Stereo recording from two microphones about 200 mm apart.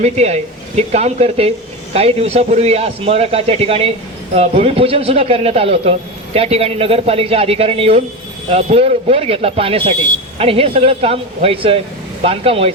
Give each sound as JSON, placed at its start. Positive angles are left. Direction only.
{"t": 0.0, "sound": "a man's voice", "side_deg": -35}